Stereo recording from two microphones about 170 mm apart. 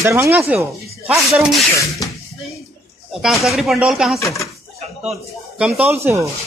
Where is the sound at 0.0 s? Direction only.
15° right (ahead or behind).